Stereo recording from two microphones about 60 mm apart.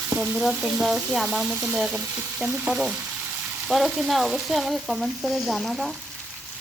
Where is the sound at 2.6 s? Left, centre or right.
Centre.